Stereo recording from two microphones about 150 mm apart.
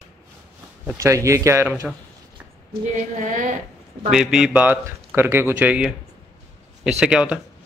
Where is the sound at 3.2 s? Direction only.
60° right (ahead or behind).